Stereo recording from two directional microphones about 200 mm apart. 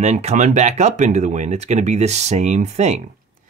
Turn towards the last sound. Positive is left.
turn(degrees=-35)  # may be behind; listen again after turning